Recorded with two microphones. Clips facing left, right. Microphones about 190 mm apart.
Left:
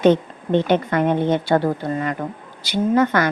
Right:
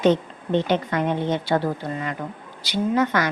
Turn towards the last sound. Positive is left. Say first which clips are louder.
# left 4 dB
turn(degrees=50)  # may be behind; listen again after turning